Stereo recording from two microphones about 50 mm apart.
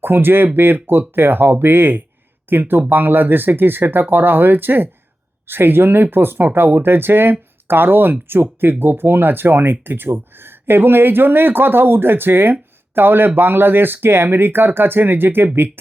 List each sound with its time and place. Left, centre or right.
0.0 s speech: right